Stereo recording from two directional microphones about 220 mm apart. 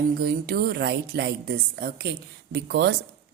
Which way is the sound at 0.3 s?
45° right (ahead or behind).